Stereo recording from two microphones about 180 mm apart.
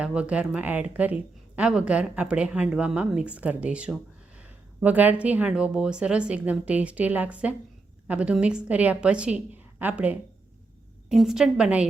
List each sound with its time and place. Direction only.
0.0 s a woman's voice: 5° right (ahead or behind)